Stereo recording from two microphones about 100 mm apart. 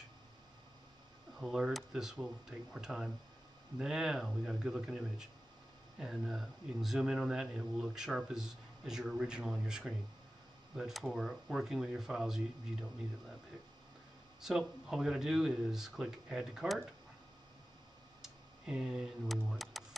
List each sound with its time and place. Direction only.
1.4 s speech: 5° right (ahead or behind)
14.6 s speech: 5° right (ahead or behind)
18.2 s speech: 5° right (ahead or behind)